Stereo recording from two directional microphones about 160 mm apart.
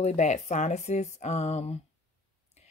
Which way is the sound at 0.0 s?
45° left (ahead or behind).